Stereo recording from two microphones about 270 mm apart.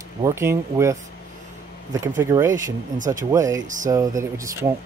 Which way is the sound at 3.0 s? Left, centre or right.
Right.